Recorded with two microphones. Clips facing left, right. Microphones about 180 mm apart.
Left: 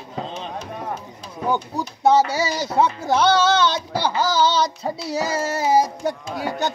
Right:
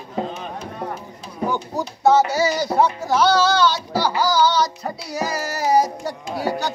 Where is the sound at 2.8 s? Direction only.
20° left (ahead or behind).